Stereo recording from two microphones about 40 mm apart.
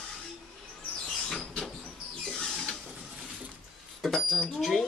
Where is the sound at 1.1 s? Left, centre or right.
Centre.